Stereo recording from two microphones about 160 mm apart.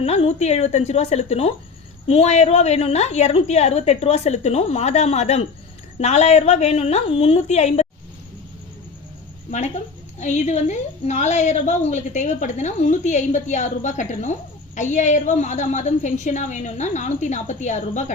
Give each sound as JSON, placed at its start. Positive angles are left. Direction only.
{"t": 0.0, "sound": "a woman's voice", "side_deg": 40}
{"t": 9.5, "sound": "a woman's voice", "side_deg": 45}